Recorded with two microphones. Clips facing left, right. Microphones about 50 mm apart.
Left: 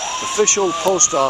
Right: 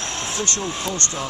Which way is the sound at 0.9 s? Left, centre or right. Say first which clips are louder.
Left 14 dB; left.